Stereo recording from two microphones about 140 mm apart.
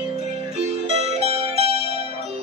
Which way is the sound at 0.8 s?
50° right (ahead or behind).